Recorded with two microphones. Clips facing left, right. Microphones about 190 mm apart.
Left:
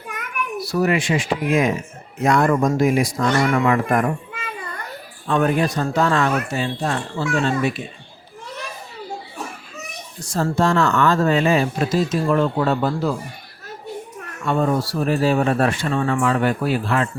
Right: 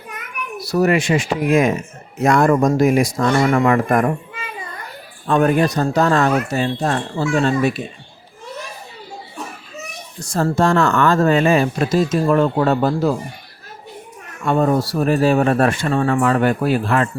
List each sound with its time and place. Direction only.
0.6 s speech: 40° right (ahead or behind)
5.3 s speech: 45° right (ahead or behind)
10.2 s speech: 45° right (ahead or behind)
14.4 s speech: 45° right (ahead or behind)